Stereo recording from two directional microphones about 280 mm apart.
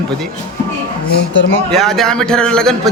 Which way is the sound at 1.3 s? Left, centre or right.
Left.